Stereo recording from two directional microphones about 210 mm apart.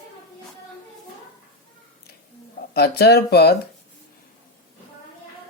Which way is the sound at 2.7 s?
50° left (ahead or behind).